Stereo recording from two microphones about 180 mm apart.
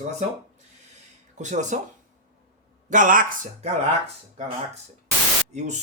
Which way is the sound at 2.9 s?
45° right (ahead or behind).